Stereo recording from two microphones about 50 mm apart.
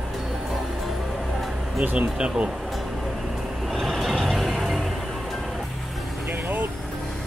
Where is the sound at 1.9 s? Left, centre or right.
Centre.